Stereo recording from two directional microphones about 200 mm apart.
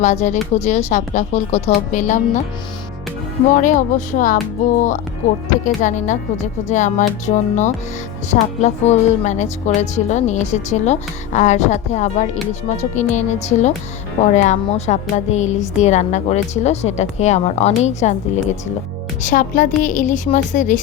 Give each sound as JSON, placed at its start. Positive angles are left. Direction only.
{"t": 0.0, "sound": "a woman's voice", "side_deg": 35}
{"t": 3.5, "sound": "a woman's voice", "side_deg": 40}
{"t": 19.2, "sound": "a woman's voice", "side_deg": 40}